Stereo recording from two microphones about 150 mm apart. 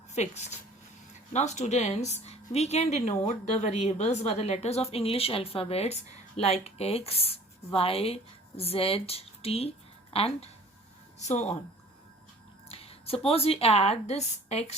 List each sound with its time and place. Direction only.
0.1 s a woman's voice: 50° left (ahead or behind)
12.6 s speech: 40° left (ahead or behind)